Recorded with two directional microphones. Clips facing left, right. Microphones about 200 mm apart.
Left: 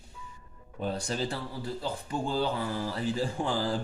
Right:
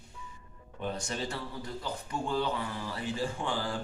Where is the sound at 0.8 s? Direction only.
35° left (ahead or behind).